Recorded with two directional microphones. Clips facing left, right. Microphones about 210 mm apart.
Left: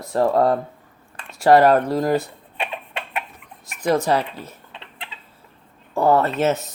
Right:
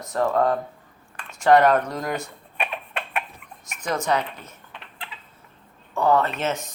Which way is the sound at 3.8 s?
35° left (ahead or behind).